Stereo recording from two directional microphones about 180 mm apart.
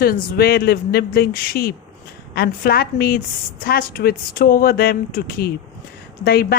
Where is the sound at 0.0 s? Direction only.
60° left (ahead or behind).